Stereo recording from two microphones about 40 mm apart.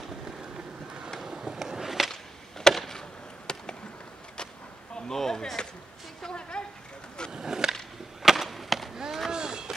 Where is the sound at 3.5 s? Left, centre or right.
Centre.